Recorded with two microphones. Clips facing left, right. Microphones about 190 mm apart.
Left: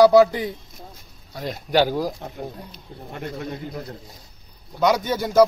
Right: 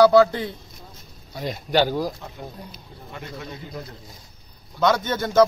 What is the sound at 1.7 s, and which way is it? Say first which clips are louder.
Speech: left 1 dB; 10° left (ahead or behind).